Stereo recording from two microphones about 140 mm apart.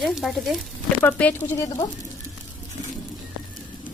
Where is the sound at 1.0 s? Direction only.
15° left (ahead or behind).